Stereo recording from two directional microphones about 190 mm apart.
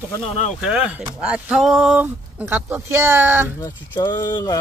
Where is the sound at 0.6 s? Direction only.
5° right (ahead or behind).